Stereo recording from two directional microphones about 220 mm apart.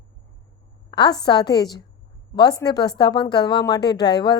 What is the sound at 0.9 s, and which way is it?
A woman's voice, 20° left (ahead or behind).